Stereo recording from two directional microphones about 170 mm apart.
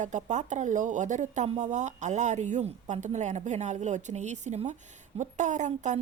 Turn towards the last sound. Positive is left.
turn(degrees=-45)  # may be behind; listen again after turning